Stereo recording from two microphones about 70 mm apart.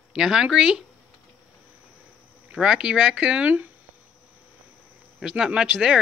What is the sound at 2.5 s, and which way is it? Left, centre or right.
Speech, centre.